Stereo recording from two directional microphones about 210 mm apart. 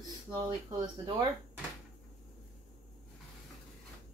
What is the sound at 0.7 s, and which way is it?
Speech, 20° right (ahead or behind).